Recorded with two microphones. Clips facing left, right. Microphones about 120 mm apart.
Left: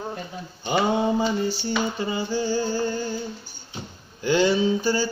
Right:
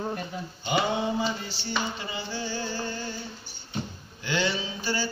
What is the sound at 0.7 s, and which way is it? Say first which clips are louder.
Mantra: left 5 dB; 45° left (ahead or behind).